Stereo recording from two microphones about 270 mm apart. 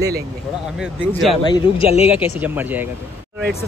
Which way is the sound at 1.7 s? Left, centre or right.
Left.